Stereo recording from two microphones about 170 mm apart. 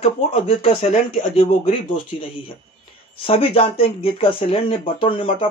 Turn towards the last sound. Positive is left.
turn(degrees=30)  # may be behind; listen again after turning